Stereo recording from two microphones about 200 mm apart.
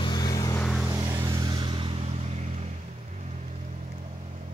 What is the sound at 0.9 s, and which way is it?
Vehicle, 15° right (ahead or behind).